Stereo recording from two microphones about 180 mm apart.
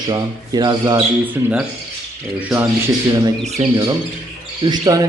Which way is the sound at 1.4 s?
15° right (ahead or behind).